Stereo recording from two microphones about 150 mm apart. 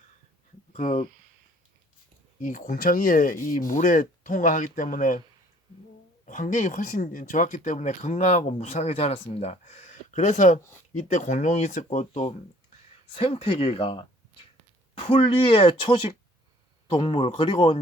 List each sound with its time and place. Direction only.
0.7 s speech: 50° left (ahead or behind)
2.4 s speech: 60° left (ahead or behind)
6.2 s speech: 60° left (ahead or behind)
13.1 s speech: 40° left (ahead or behind)